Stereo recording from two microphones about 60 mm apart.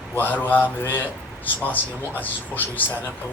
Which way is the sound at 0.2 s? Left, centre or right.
Left.